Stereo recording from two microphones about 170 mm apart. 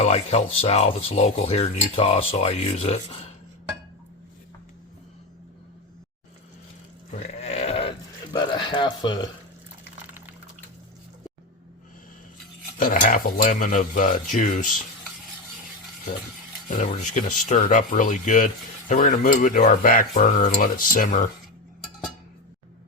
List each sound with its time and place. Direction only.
0.0 s speech: 40° left (ahead or behind)
7.1 s sheep: 40° left (ahead or behind)
12.8 s speech: 55° left (ahead or behind)
16.6 s speech: 45° left (ahead or behind)